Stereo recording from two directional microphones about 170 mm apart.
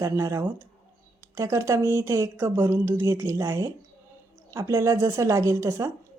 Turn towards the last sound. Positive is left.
turn(degrees=-15)  # may be behind; listen again after turning